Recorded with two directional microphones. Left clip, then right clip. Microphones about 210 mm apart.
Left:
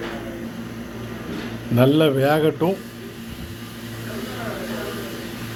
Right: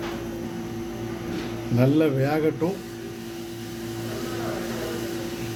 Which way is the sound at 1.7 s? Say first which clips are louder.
Left 5 dB; 25° left (ahead or behind).